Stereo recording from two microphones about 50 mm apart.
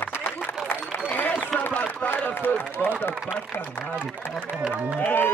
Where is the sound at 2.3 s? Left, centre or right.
Left.